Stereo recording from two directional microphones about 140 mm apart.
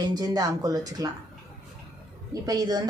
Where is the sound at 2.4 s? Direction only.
25° right (ahead or behind).